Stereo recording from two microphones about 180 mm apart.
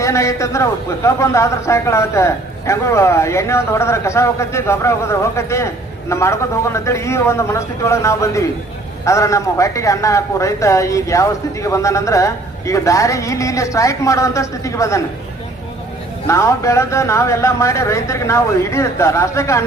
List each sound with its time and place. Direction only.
0.0 s a man's voice: 15° left (ahead or behind)
16.2 s a man's voice: 15° left (ahead or behind)